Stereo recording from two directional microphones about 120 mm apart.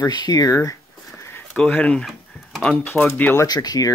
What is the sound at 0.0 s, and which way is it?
Speech, 35° left (ahead or behind).